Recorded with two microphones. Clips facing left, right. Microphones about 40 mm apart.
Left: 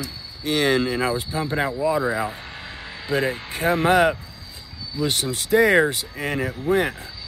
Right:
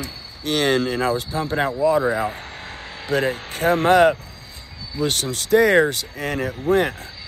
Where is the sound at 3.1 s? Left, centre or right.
Centre.